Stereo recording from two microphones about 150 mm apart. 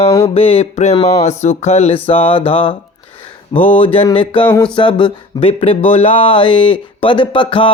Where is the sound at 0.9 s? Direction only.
25° left (ahead or behind).